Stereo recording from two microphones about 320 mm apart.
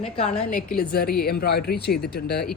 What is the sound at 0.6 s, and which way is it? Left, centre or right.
A woman's voice, left.